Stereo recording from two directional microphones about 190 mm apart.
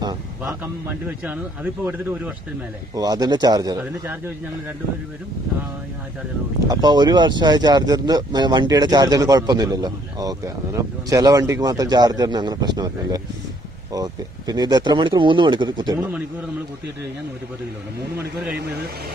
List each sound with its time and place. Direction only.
1.2 s speech: 10° right (ahead or behind)
2.9 s speech: 20° right (ahead or behind)
6.7 s speech: 20° right (ahead or behind)